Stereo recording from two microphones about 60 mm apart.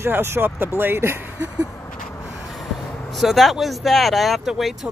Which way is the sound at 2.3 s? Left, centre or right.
Centre.